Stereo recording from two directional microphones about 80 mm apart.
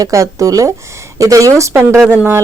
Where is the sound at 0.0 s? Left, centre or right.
Right.